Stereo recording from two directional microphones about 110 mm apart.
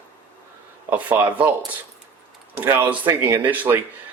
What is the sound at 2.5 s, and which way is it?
Speech, 20° right (ahead or behind).